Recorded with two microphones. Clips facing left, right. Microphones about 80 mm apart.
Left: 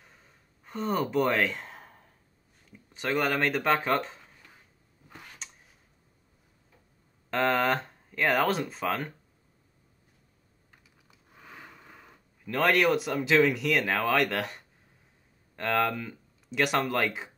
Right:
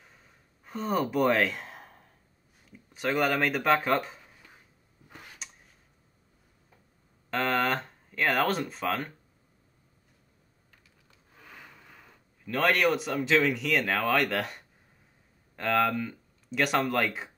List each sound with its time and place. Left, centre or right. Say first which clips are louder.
0.0 s gasp: even; centre
2.7 s speech: even; centre
7.2 s speech: left 2 dB; centre
11.1 s a sound: left 2 dB; centre
12.4 s speech: left 1 dB; centre